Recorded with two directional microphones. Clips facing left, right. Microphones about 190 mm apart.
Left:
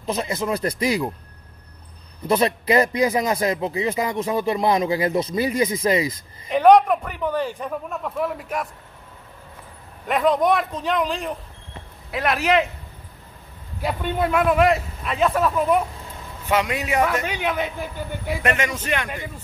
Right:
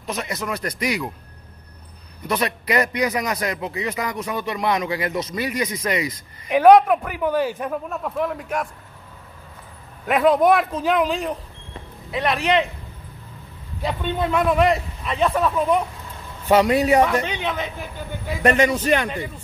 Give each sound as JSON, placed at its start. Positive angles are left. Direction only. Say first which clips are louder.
{"t": 0.0, "sound": "a man's voice", "louder": "left 3 dB", "side_deg": 30}
{"t": 2.2, "sound": "a man's voice", "louder": "left 4 dB", "side_deg": 30}
{"t": 6.5, "sound": "a man's voice", "louder": "right 2 dB", "side_deg": -5}
{"t": 10.0, "sound": "a man's voice", "louder": "right 3 dB", "side_deg": -5}
{"t": 13.7, "sound": "a man's voice", "louder": "left 1 dB", "side_deg": 5}
{"t": 16.4, "sound": "a man's voice", "louder": "right 7 dB", "side_deg": -35}
{"t": 17.2, "sound": "a woman's voice", "louder": "left 1 dB", "side_deg": 10}
{"t": 18.4, "sound": "a man's voice", "louder": "right 8 dB", "side_deg": -35}